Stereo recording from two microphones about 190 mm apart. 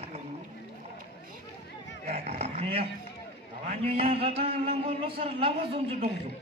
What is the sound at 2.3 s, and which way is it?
Dog, 35° right (ahead or behind).